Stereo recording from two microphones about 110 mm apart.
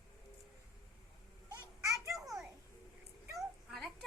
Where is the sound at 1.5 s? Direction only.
30° right (ahead or behind).